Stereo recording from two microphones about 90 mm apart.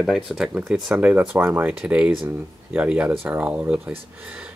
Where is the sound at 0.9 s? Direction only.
15° right (ahead or behind).